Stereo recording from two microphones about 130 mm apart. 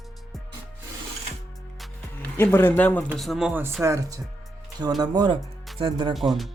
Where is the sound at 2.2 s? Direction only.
15° left (ahead or behind).